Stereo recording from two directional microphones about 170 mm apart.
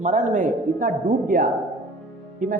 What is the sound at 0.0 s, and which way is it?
A woman's voice, 50° right (ahead or behind).